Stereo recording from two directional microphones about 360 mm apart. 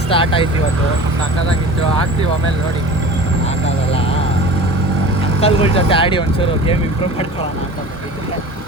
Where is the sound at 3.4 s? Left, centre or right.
Centre.